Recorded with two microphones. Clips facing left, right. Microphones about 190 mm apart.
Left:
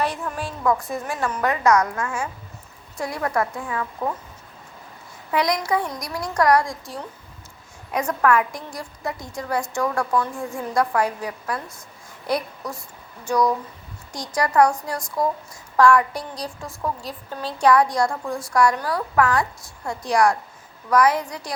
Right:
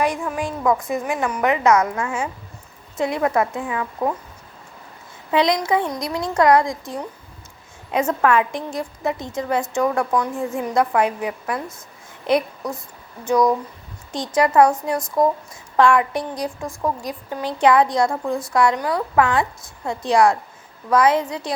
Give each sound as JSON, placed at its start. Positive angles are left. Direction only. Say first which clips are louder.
{"t": 0.0, "sound": "a woman's voice", "louder": "right 4 dB", "side_deg": -15}
{"t": 5.3, "sound": "a woman's voice", "louder": "right 3 dB", "side_deg": -25}